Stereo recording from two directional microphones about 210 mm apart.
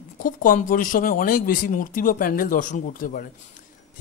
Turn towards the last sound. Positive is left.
turn(degrees=40)  # may be behind; listen again after turning